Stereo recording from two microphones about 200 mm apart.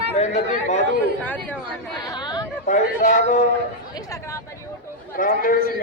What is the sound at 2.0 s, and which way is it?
Speech, 20° left (ahead or behind).